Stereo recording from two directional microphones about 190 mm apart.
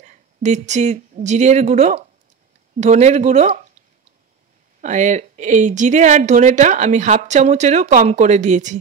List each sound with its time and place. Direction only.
0.0 s speech: 40° right (ahead or behind)
4.8 s speech: 40° right (ahead or behind)